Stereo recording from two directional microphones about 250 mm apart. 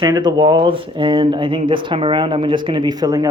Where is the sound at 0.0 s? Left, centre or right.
Centre.